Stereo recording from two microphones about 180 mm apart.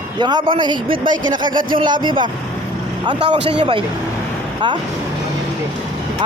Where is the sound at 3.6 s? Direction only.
30° right (ahead or behind).